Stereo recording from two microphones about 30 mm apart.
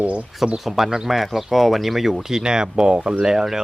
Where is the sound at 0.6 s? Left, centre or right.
Centre.